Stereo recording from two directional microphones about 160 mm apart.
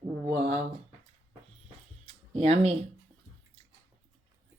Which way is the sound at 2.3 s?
40° right (ahead or behind).